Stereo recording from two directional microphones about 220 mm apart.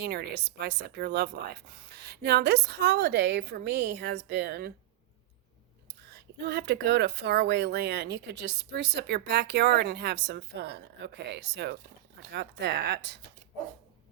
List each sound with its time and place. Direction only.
0.0 s speech: 45° right (ahead or behind)
6.1 s speech: 50° right (ahead or behind)